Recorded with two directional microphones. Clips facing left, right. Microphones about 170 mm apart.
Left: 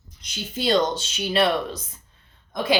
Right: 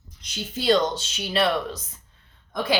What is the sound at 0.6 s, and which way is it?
Speech, 15° left (ahead or behind).